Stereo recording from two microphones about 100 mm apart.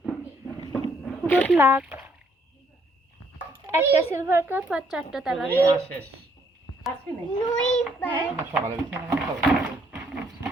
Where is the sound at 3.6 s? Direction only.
20° right (ahead or behind); by 5.4 s 5° right (ahead or behind).